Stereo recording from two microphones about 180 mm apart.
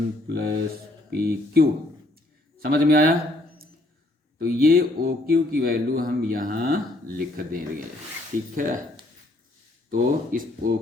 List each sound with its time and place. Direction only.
0.3 s speech: 55° right (ahead or behind)
4.4 s speech: 55° right (ahead or behind)
9.9 s speech: 50° right (ahead or behind)